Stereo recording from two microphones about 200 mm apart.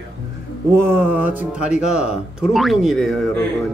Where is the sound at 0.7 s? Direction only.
10° right (ahead or behind).